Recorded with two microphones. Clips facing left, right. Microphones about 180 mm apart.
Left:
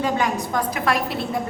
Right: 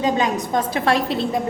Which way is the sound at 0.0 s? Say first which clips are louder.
Right 2 dB; 20° right (ahead or behind).